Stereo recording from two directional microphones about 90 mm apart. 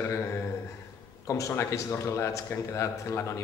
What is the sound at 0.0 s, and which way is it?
A man's voice, 30° left (ahead or behind).